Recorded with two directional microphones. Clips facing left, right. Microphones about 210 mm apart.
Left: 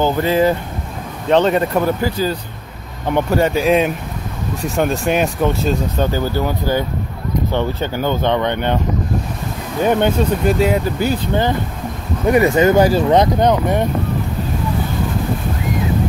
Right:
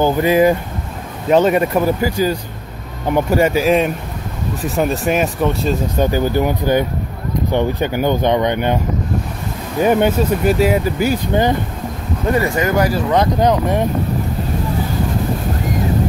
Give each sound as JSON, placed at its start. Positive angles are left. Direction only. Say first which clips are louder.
{"t": 0.0, "sound": "speech", "louder": "right 2 dB", "side_deg": -15}
{"t": 5.9, "sound": "speech", "louder": "right 3 dB", "side_deg": -15}
{"t": 9.8, "sound": "speech", "louder": "right 1 dB", "side_deg": -10}
{"t": 12.3, "sound": "speech", "louder": "left 5 dB", "side_deg": 20}
{"t": 13.4, "sound": "speech", "louder": "even", "side_deg": 0}